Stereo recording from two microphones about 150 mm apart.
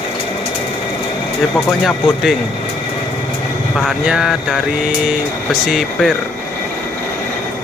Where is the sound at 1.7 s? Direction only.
Centre (ahead or behind).